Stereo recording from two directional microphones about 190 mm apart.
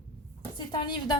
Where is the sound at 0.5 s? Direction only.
25° left (ahead or behind).